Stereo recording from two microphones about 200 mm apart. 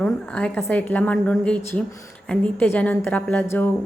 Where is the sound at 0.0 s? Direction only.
5° left (ahead or behind).